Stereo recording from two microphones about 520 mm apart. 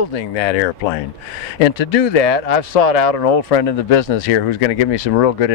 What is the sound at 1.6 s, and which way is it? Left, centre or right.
Speech, left.